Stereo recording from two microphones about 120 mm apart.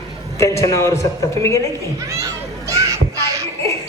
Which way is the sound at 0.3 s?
25° left (ahead or behind).